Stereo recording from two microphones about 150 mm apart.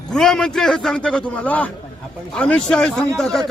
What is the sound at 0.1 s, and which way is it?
Speech, 5° left (ahead or behind).